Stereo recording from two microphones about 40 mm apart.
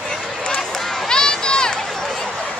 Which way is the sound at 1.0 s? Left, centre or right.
Centre.